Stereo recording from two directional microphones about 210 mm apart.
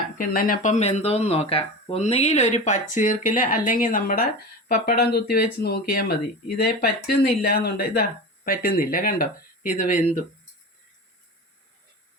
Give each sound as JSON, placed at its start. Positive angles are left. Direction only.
{"t": 0.2, "sound": "speech", "side_deg": 40}